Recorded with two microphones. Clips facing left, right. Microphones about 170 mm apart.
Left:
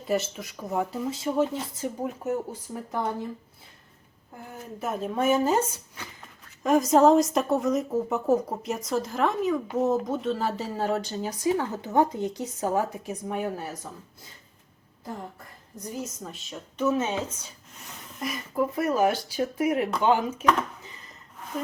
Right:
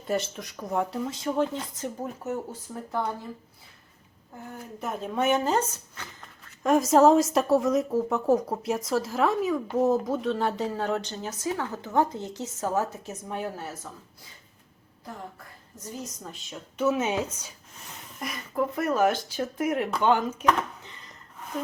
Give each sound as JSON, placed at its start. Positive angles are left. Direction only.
{"t": 0.1, "sound": "a woman's voice", "side_deg": 5}
{"t": 4.8, "sound": "a woman's voice", "side_deg": 5}
{"t": 16.2, "sound": "a woman's voice", "side_deg": 0}
{"t": 18.2, "sound": "a woman's voice", "side_deg": 0}